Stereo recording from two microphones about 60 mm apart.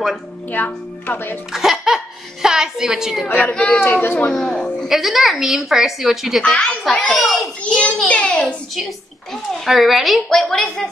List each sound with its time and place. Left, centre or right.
0.5 s speech: left
1.5 s giggle: centre
2.4 s a woman's voice: centre
3.5 s a child's voice: centre
3.8 s speech: left
4.3 s a child's voice: centre
4.8 s speech: centre
6.4 s a child's voice: centre
7.1 s speech: centre
7.6 s a child's voice: centre
9.3 s a child's voice: centre